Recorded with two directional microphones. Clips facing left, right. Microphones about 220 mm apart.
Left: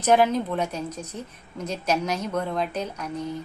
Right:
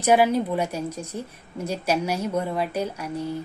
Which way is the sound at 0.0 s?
10° right (ahead or behind).